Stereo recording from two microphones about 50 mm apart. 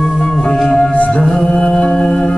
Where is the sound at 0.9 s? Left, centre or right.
Left.